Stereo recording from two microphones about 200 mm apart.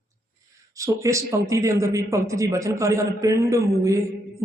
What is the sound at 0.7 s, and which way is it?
Speech, 15° right (ahead or behind).